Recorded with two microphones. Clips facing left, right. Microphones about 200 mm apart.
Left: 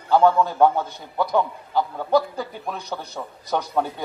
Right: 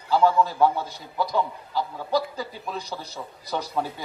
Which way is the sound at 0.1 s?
55° left (ahead or behind).